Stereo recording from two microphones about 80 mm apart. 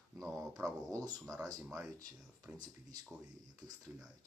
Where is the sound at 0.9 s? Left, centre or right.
Right.